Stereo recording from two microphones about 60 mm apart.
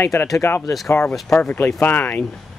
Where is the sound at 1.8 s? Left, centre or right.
Left.